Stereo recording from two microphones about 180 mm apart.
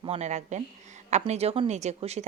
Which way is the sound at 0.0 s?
35° right (ahead or behind).